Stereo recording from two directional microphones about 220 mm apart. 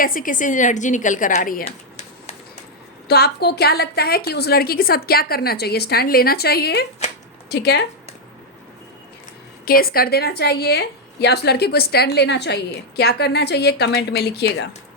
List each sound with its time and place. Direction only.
0.0 s a woman's voice: 40° left (ahead or behind)
3.1 s a woman's voice: 45° left (ahead or behind)
9.6 s a woman's voice: 40° left (ahead or behind)